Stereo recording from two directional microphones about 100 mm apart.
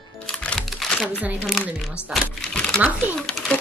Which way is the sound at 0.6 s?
Centre (ahead or behind).